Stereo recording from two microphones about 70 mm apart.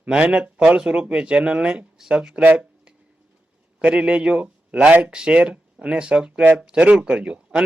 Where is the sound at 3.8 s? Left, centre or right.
Centre.